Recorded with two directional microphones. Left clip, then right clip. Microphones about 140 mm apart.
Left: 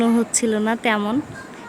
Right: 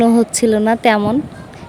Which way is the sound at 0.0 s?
40° right (ahead or behind).